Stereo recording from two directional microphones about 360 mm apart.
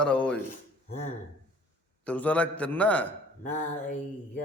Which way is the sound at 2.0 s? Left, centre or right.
Centre.